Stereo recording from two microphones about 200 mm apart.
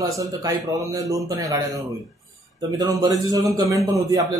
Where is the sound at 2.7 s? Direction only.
15° right (ahead or behind).